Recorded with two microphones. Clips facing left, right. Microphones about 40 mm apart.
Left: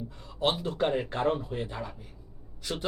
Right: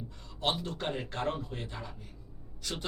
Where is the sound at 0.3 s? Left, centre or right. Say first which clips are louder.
Left 5 dB; centre.